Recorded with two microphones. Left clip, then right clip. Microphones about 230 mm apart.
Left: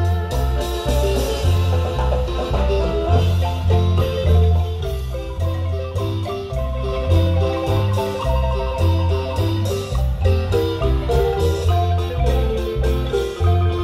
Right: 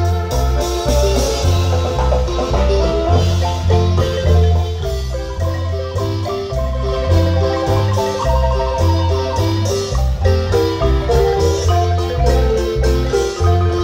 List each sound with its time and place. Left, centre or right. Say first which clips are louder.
0.6 s music: right 5 dB; right
3.7 s marimba: right 4 dB; right
6.9 s marimba: right 4 dB; right
10.2 s music: right 5 dB; right
12.3 s marimba: right 6 dB; right